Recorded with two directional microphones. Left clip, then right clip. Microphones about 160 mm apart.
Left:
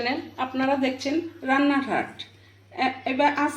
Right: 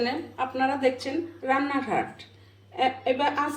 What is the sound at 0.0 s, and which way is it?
Speech, 30° left (ahead or behind).